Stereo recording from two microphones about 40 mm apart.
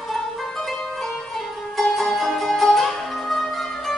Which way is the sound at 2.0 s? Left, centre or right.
Centre.